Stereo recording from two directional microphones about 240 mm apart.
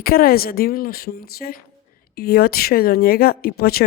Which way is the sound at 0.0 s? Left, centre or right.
Left.